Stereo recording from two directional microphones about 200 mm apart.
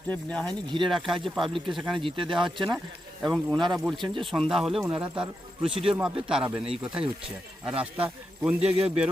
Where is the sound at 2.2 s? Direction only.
25° right (ahead or behind).